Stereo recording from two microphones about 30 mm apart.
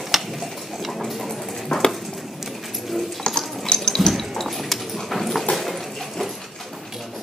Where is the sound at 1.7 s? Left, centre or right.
Left.